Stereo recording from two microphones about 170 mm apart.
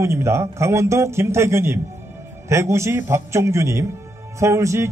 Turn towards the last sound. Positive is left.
turn(degrees=-15)  # may be behind; listen again after turning